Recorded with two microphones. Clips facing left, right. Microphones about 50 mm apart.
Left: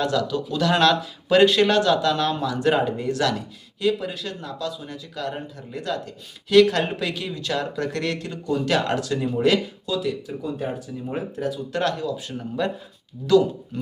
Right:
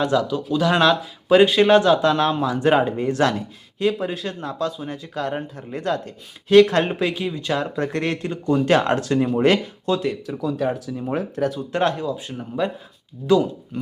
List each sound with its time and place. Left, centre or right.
0.0 s speech: right
1.7 s speech: right
7.1 s speech: right
10.2 s speech: right
11.7 s speech: right
12.3 s speech: centre